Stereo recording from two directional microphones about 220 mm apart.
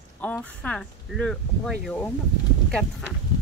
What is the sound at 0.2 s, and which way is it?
Speech, 5° left (ahead or behind).